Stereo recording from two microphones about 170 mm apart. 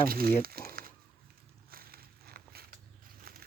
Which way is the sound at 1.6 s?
60° right (ahead or behind).